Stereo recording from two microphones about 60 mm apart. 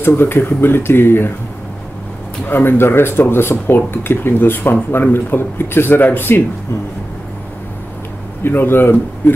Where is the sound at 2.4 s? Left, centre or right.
Left.